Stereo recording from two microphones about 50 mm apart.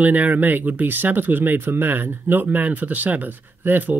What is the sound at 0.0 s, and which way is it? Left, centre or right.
Speech, right.